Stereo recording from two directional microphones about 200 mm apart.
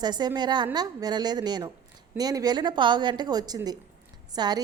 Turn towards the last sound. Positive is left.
turn(degrees=-20)  # may be behind; listen again after turning